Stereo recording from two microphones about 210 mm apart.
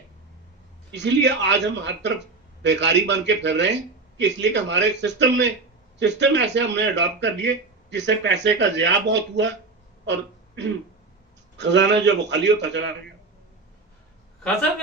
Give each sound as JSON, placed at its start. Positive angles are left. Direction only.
{"t": 0.9, "sound": "speech", "side_deg": -55}
{"t": 10.1, "sound": "throat clearing", "side_deg": -60}
{"t": 11.5, "sound": "speech", "side_deg": -55}